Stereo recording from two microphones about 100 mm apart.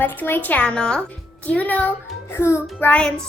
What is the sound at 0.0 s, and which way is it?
A child's voice, 20° left (ahead or behind).